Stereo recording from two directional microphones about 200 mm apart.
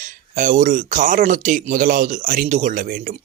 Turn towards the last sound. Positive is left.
turn(degrees=-40)  # may be behind; listen again after turning